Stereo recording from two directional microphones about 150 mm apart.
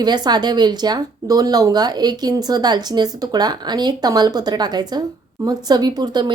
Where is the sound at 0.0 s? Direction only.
30° right (ahead or behind).